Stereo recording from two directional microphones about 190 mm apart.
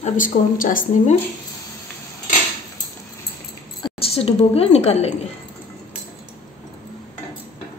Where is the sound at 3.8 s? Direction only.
30° left (ahead or behind).